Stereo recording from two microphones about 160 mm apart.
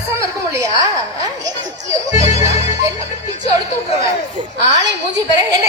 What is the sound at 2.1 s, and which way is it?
Music, 20° right (ahead or behind).